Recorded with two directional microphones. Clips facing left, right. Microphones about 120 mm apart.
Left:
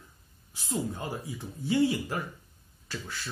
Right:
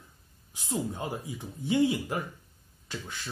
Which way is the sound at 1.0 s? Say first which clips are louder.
Right 1 dB; 20° right (ahead or behind).